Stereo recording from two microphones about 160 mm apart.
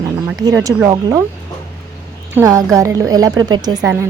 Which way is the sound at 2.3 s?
20° right (ahead or behind).